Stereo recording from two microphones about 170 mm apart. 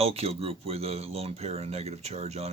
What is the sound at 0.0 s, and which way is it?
Speech, 35° right (ahead or behind).